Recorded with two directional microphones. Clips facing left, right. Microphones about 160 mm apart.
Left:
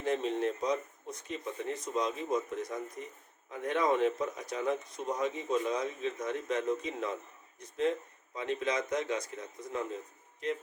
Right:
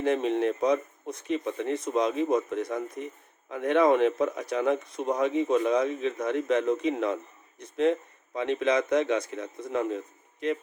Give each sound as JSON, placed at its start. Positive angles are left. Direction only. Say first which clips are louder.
{"t": 0.0, "sound": "a man's voice", "louder": "right 6 dB", "side_deg": -65}